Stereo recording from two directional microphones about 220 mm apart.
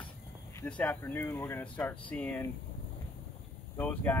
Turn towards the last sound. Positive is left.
turn(degrees=10)  # may be behind; listen again after turning